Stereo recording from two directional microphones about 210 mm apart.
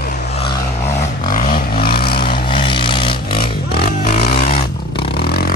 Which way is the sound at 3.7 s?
50° left (ahead or behind).